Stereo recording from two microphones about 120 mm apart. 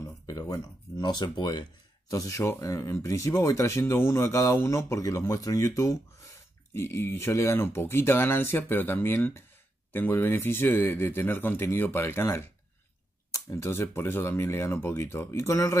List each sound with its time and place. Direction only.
0.3 s speech: 30° left (ahead or behind)